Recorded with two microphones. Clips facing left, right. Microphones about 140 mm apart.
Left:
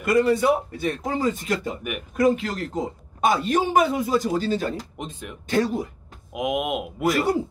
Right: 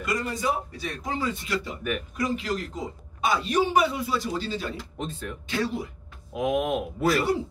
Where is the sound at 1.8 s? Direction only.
15° left (ahead or behind).